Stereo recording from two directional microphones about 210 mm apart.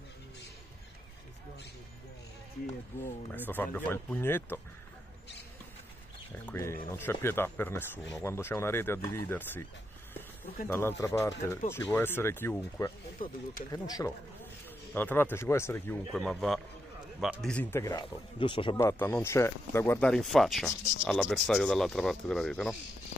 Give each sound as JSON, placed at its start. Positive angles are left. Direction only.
{"t": 3.4, "sound": "speech", "side_deg": 10}
{"t": 6.5, "sound": "speech", "side_deg": 10}
{"t": 10.7, "sound": "speech", "side_deg": 10}
{"t": 18.8, "sound": "speech", "side_deg": 10}